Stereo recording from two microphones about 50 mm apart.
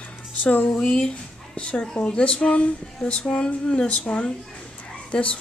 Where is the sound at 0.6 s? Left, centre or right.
Centre.